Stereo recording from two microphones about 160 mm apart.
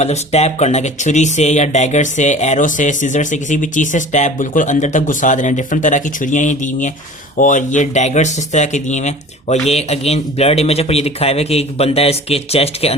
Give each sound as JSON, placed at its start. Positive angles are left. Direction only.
{"t": 0.0, "sound": "speech", "side_deg": 45}